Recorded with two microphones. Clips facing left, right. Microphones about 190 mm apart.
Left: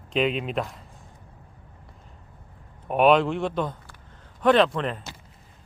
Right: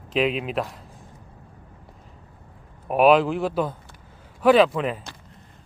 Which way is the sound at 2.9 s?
5° right (ahead or behind).